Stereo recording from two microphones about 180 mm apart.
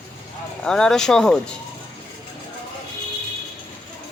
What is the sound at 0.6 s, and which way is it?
Speech, 5° left (ahead or behind).